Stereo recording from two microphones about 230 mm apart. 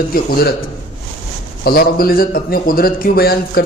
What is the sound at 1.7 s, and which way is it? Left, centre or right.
A man's voice, left.